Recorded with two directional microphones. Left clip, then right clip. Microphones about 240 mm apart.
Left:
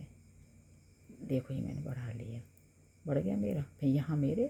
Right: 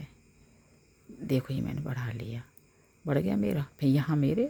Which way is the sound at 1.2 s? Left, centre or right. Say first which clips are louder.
Right 6 dB; right.